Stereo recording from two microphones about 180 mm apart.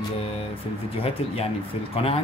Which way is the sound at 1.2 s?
35° left (ahead or behind).